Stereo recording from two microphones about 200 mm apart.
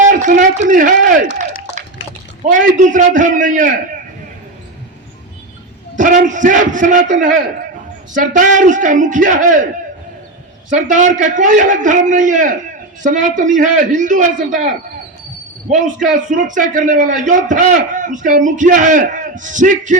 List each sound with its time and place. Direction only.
0.1 s a sound: 40° right (ahead or behind)
0.7 s a man's voice: 40° right (ahead or behind)
2.4 s a man's voice: 40° right (ahead or behind)
6.0 s a man's voice: 40° right (ahead or behind)
10.7 s a man's voice: 40° right (ahead or behind)
15.7 s a man's voice: 40° right (ahead or behind)